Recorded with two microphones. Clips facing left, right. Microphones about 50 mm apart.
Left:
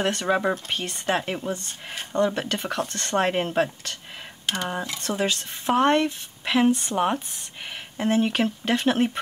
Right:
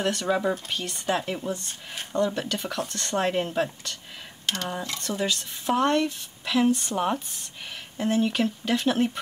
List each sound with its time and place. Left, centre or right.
0.0 s speech: left
4.5 s speech: centre
5.0 s speech: left